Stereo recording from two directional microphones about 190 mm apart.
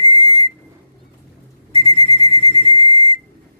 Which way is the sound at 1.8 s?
30° left (ahead or behind).